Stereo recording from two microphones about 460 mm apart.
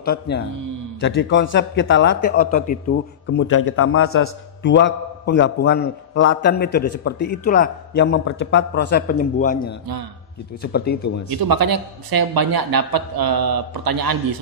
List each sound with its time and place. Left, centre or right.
0.0 s a man's voice: centre
11.2 s a man's voice: right